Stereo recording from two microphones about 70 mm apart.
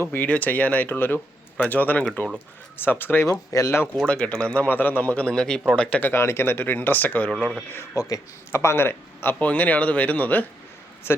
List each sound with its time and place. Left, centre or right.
0.0 s speech: left
3.5 s speech: left
3.9 s a man's voice: centre
6.0 s speech: left
7.9 s speech: left
9.4 s speech: left